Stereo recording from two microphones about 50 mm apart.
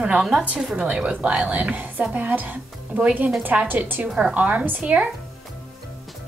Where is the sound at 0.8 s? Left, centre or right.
Right.